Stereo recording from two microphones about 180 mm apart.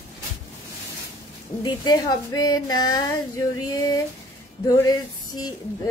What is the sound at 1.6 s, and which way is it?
Speech, 25° left (ahead or behind).